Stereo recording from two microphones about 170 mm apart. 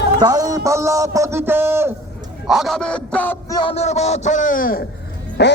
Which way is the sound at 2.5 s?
Centre (ahead or behind).